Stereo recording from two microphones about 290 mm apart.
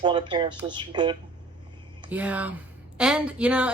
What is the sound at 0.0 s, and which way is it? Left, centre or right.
A woman's voice, centre.